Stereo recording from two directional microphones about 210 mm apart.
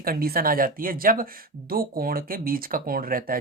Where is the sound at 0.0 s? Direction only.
45° right (ahead or behind).